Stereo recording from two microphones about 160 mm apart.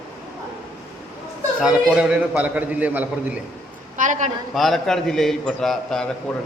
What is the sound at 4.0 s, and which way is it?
Speech, 50° right (ahead or behind).